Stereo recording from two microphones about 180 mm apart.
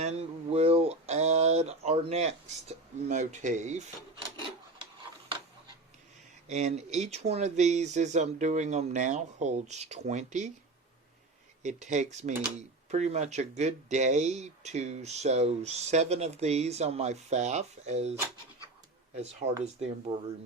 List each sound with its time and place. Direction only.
0.0 s a sound: 35° right (ahead or behind)
6.5 s speech: 40° right (ahead or behind)
11.6 s speech: 40° right (ahead or behind)
19.1 s speech: 35° right (ahead or behind)